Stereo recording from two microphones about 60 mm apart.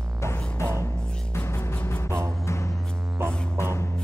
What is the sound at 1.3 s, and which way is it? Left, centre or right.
Music, left.